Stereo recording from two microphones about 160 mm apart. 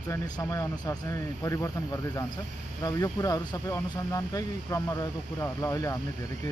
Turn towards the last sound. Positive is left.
turn(degrees=20)  # may be behind; listen again after turning